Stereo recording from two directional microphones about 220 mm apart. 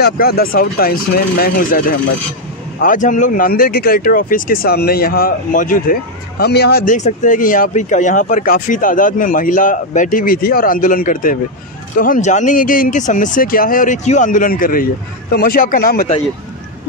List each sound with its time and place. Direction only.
0.0 s speech: 45° left (ahead or behind)